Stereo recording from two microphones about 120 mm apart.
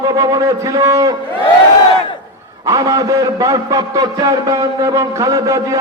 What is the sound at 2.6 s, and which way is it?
A man's voice, 25° right (ahead or behind).